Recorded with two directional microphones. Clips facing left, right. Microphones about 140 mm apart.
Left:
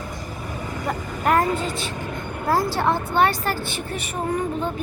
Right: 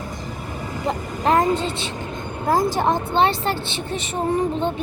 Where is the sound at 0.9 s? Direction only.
25° right (ahead or behind).